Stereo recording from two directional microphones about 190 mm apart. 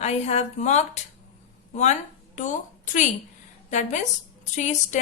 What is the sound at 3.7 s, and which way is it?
A woman's voice, 40° left (ahead or behind).